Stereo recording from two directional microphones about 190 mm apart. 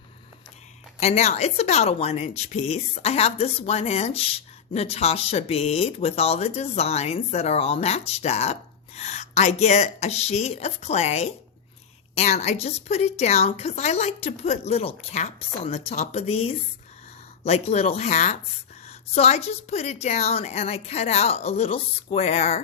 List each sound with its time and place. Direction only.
0.9 s speech: 35° left (ahead or behind)